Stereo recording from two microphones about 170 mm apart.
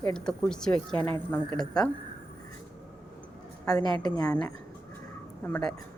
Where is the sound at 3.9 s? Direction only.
25° left (ahead or behind).